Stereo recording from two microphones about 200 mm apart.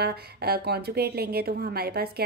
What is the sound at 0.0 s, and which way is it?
A woman's voice, 50° right (ahead or behind).